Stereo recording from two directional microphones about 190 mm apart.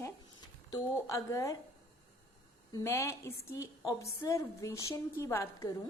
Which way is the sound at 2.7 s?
15° left (ahead or behind).